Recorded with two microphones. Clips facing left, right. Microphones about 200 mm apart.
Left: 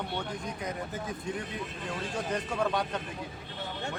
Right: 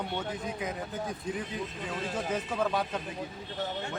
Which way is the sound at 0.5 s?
Centre (ahead or behind).